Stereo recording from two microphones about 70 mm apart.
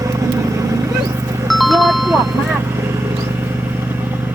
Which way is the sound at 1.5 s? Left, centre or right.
Centre.